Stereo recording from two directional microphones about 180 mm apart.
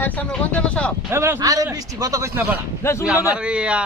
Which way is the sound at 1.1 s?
15° right (ahead or behind).